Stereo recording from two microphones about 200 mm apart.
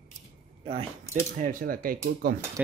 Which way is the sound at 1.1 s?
40° right (ahead or behind).